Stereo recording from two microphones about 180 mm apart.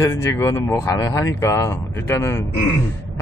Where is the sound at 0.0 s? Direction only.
15° left (ahead or behind).